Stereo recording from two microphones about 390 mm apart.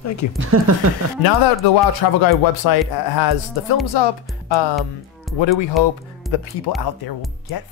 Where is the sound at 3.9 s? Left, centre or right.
Left.